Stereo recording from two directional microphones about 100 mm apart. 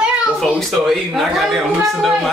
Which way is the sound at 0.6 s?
Centre (ahead or behind).